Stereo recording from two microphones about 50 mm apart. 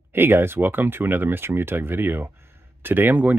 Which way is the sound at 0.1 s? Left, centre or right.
Right.